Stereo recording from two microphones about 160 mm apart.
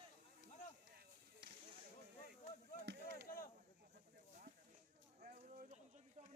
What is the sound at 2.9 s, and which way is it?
Chop, 90° right.